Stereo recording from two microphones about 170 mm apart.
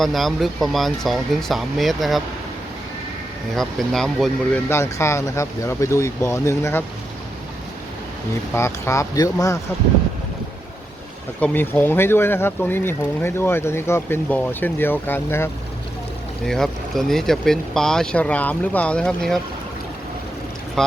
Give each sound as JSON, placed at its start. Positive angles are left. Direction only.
{"t": 0.0, "sound": "speech", "side_deg": 0}
{"t": 3.5, "sound": "speech", "side_deg": 0}
{"t": 4.7, "sound": "speech", "side_deg": 15}
{"t": 8.5, "sound": "speech", "side_deg": 15}
{"t": 11.3, "sound": "speech", "side_deg": 10}
{"t": 16.5, "sound": "speech", "side_deg": 0}
{"t": 20.8, "sound": "speech", "side_deg": 5}